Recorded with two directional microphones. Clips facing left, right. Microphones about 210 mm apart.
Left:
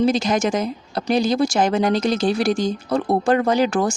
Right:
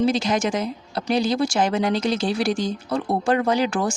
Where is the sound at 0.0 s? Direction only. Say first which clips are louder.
Left 2 dB; 45° left (ahead or behind).